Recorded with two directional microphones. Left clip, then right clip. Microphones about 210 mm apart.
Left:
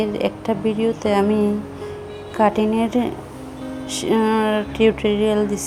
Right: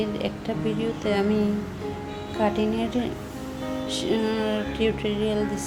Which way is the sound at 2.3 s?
25° left (ahead or behind).